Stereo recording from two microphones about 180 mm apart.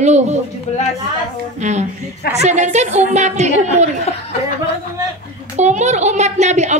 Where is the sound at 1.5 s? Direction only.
40° right (ahead or behind).